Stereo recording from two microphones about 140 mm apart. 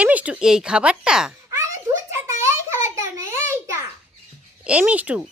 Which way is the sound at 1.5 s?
20° right (ahead or behind).